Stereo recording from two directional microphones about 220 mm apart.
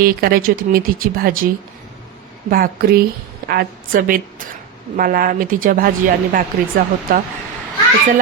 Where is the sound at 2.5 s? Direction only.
45° right (ahead or behind).